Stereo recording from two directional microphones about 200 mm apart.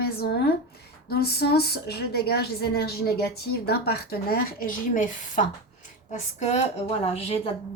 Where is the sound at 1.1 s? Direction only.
50° left (ahead or behind).